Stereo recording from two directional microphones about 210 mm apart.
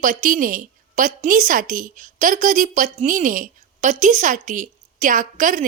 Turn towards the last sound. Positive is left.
turn(degrees=-40)  # may be behind; listen again after turning